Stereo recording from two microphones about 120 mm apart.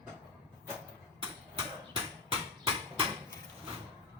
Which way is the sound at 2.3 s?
50° right (ahead or behind).